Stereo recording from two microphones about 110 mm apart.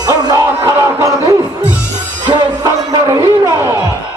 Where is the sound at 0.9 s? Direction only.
25° right (ahead or behind).